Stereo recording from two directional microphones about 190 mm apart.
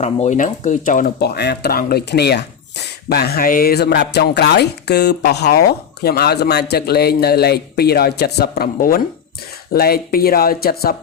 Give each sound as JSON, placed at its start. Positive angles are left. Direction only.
{"t": 0.0, "sound": "speech", "side_deg": 40}